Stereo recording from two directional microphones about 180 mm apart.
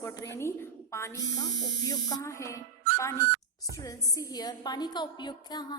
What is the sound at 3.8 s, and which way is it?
A woman's voice, 20° left (ahead or behind).